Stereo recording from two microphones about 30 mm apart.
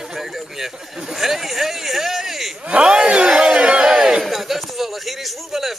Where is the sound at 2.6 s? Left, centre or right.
Right.